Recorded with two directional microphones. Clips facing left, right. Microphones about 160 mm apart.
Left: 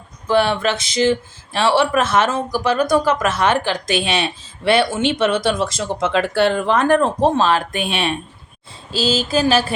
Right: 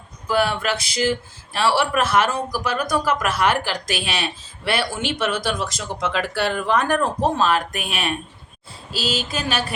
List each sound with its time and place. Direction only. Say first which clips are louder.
0.3 s speech: left 4 dB; 25° left (ahead or behind)